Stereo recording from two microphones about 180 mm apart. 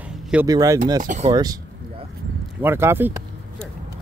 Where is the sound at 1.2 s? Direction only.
25° right (ahead or behind).